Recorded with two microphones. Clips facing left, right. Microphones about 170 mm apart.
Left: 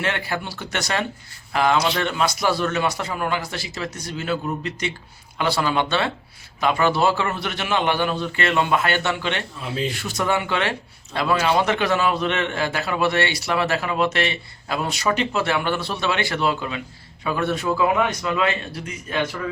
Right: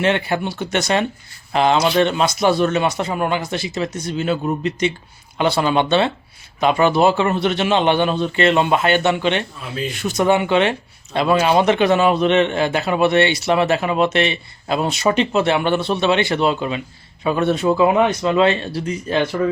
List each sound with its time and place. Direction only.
0.0 s speech: 20° right (ahead or behind)